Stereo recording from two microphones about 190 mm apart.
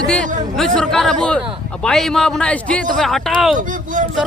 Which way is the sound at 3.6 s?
45° right (ahead or behind).